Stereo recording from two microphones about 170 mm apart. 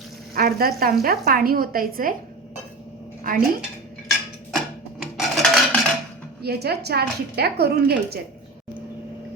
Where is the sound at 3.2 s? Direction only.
55° right (ahead or behind).